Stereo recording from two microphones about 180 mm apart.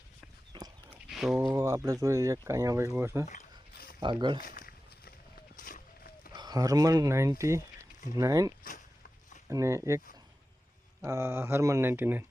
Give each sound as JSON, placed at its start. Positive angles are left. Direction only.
{"t": 0.5, "sound": "pig", "side_deg": -25}
{"t": 0.9, "sound": "a sound", "side_deg": 0}
{"t": 1.4, "sound": "speech", "side_deg": -15}
{"t": 3.2, "sound": "a sound", "side_deg": 40}
{"t": 4.0, "sound": "speech", "side_deg": -25}
{"t": 4.4, "sound": "walk", "side_deg": 50}
{"t": 5.5, "sound": "a sound", "side_deg": 50}
{"t": 6.3, "sound": "speech", "side_deg": -20}
{"t": 11.0, "sound": "speech", "side_deg": -15}